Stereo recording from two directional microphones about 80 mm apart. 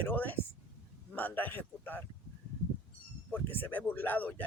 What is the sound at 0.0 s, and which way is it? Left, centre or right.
Speech, left.